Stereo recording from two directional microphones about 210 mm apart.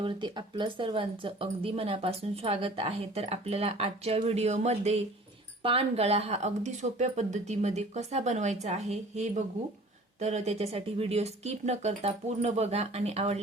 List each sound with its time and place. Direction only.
0.0 s speech: 20° right (ahead or behind)